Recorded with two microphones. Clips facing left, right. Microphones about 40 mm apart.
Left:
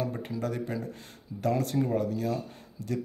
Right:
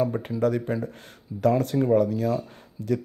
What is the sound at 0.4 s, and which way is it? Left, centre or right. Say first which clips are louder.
Speech: right 9 dB; right.